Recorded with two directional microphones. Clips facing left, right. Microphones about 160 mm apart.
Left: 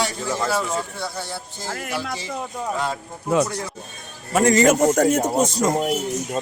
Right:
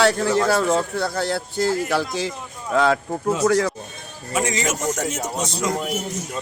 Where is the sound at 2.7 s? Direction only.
90° right.